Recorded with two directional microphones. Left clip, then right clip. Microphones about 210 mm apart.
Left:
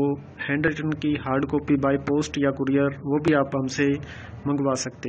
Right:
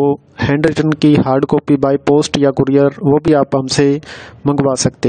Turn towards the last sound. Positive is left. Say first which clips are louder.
# right 11 dB
turn(degrees=-65)  # may be behind; listen again after turning